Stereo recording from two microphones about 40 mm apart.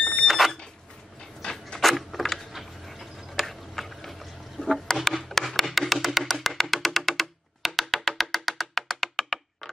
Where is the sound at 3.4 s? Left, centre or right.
Centre.